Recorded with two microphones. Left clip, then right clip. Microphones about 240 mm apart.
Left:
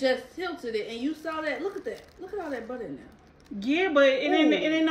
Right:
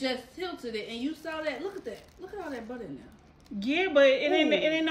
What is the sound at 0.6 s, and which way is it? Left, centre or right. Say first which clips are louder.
A woman's voice: left 4 dB; centre.